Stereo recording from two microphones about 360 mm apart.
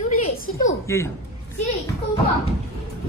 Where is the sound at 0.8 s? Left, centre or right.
Centre.